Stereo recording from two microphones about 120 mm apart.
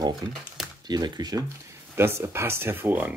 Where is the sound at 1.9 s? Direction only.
20° right (ahead or behind).